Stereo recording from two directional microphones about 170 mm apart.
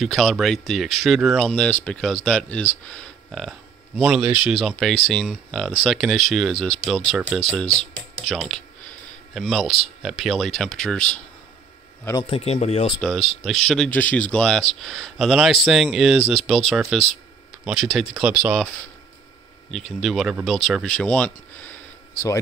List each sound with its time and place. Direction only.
0.0 s speech: centre (ahead or behind)
12.2 s speech: 35° left (ahead or behind)
13.0 s speech: centre (ahead or behind)
19.7 s speech: centre (ahead or behind)